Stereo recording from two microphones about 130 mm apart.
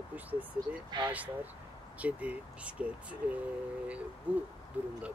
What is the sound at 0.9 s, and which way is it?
Speech, 35° right (ahead or behind).